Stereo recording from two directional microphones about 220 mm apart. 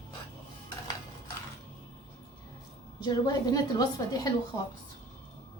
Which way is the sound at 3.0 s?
15° left (ahead or behind).